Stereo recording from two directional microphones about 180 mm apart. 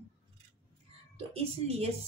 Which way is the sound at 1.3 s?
35° right (ahead or behind).